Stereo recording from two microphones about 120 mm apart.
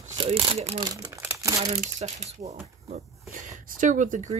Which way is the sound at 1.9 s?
70° right (ahead or behind).